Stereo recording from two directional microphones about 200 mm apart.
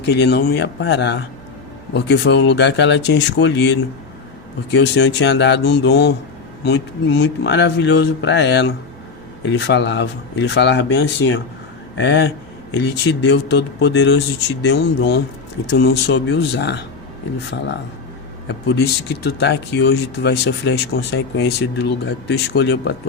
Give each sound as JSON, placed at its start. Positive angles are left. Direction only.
{"t": 0.0, "sound": "speech", "side_deg": 60}
{"t": 18.4, "sound": "speech", "side_deg": 60}